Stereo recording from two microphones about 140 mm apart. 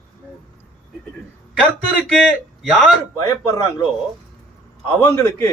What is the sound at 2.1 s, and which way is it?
Speech, centre (ahead or behind).